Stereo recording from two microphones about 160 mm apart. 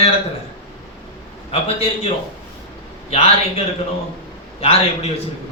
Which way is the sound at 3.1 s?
35° left (ahead or behind).